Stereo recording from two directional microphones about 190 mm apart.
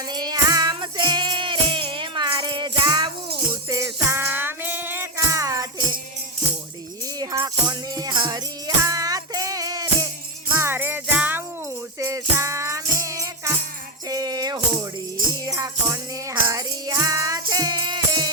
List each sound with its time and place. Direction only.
0.1 s music: 20° right (ahead or behind)
7.2 s music: 20° right (ahead or behind)